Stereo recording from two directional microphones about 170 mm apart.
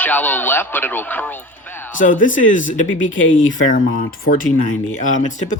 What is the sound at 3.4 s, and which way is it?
Speech, 90° left.